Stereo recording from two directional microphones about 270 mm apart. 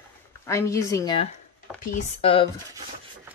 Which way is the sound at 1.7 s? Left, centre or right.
Left.